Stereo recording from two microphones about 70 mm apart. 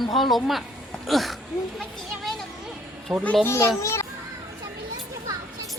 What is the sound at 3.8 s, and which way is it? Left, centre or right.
Children playing, left.